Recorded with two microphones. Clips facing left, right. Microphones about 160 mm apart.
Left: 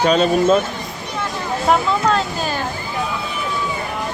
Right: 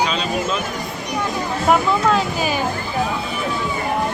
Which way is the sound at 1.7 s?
5° right (ahead or behind).